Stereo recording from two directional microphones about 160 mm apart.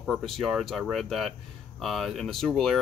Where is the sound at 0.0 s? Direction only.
Centre (ahead or behind).